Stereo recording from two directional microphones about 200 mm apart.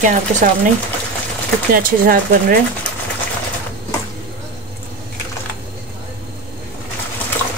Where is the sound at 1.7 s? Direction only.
45° right (ahead or behind).